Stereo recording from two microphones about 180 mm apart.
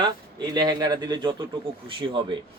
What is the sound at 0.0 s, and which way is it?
A man's voice, 25° right (ahead or behind).